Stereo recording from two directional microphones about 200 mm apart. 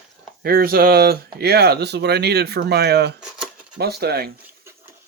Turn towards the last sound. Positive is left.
turn(degrees=-10)  # may be behind; listen again after turning